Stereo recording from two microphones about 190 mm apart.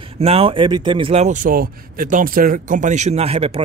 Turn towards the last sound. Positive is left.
turn(degrees=-30)  # may be behind; listen again after turning